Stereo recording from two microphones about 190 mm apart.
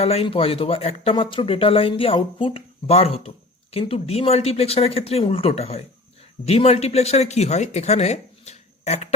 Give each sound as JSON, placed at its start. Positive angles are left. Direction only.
{"t": 0.0, "sound": "speech", "side_deg": 30}